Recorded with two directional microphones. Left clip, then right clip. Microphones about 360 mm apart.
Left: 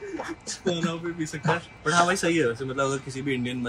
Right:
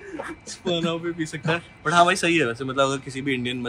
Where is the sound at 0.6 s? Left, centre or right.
Centre.